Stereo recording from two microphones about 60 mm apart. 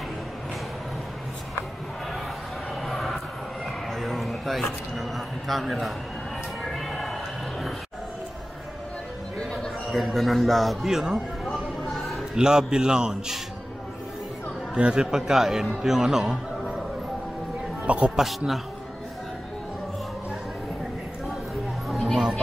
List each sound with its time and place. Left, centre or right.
2.8 s a sound: centre
3.9 s speech: centre
6.6 s a sound: centre
9.5 s a man's voice: centre
11.8 s a sound: centre
12.4 s a man's voice: centre
14.7 s a man's voice: centre
17.8 s speech: right
18.1 s a man's voice: centre
21.8 s music: centre